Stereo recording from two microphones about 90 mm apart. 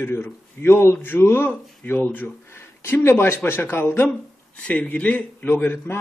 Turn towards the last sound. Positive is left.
turn(degrees=25)  # may be behind; listen again after turning